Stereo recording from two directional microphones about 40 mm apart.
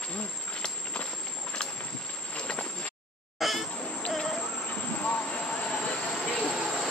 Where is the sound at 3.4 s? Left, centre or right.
Centre.